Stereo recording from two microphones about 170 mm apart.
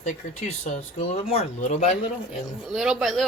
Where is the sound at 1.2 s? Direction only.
35° left (ahead or behind).